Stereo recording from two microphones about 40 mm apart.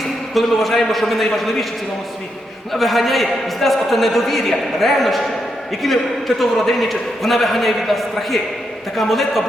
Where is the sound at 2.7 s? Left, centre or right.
Centre.